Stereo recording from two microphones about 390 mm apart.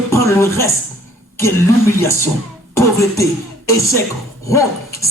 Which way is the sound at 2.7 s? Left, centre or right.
Centre.